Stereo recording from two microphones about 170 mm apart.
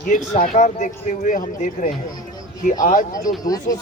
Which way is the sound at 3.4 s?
20° left (ahead or behind).